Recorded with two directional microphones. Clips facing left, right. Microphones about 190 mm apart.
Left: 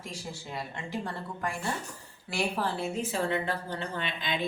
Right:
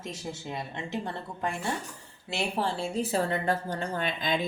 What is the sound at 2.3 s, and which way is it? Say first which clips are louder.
Speech: right 1 dB; 25° right (ahead or behind).